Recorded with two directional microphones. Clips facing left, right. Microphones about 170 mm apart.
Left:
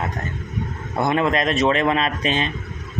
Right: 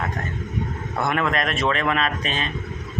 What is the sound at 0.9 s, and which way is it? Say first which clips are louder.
A man's voice: left 4 dB; 20° left (ahead or behind).